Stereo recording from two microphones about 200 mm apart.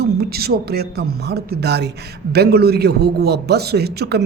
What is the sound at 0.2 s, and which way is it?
A man's voice, 50° right (ahead or behind).